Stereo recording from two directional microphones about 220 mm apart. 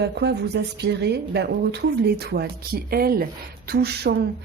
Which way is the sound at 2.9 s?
45° right (ahead or behind).